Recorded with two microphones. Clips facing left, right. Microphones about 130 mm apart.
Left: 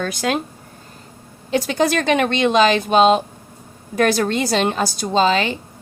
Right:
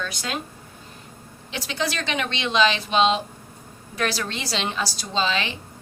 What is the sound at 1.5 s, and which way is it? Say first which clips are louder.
A woman's voice: left 10 dB; 50° left (ahead or behind).